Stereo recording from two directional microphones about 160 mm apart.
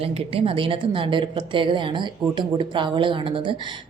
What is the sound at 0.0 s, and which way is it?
A woman's voice, 35° right (ahead or behind).